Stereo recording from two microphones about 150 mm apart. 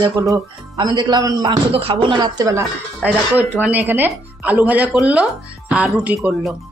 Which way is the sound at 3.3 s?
10° right (ahead or behind).